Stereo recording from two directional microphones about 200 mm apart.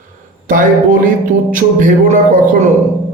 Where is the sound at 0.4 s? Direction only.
40° right (ahead or behind).